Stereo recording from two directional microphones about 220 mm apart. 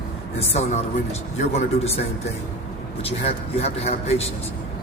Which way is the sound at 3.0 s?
30° left (ahead or behind).